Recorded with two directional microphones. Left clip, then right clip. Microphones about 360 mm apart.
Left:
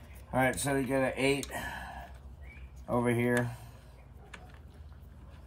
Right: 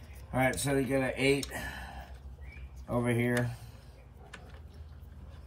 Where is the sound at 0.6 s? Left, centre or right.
Centre.